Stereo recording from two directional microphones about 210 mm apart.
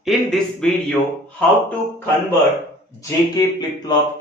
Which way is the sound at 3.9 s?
20° left (ahead or behind).